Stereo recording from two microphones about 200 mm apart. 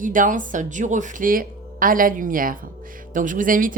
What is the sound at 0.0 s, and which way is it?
Speech, 40° right (ahead or behind).